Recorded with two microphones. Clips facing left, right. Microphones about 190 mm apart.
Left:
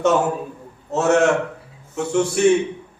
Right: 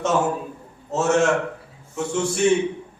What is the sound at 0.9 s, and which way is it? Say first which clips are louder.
A man's voice: left 3 dB; 60° left (ahead or behind).